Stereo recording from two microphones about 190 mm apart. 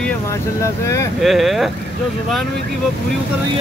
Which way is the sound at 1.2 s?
Centre (ahead or behind).